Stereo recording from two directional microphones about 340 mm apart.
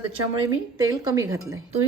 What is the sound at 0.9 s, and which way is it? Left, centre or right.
Speech, centre.